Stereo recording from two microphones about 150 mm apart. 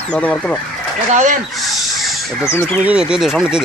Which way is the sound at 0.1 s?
10° left (ahead or behind).